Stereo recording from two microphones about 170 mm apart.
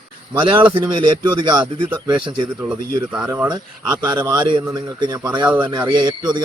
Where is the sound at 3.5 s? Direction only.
25° right (ahead or behind).